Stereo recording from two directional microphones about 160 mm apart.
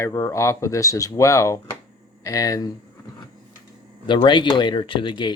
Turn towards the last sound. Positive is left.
turn(degrees=30)  # may be behind; listen again after turning